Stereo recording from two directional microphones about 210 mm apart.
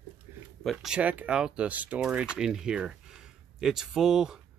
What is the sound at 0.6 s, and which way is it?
Speech, centre (ahead or behind).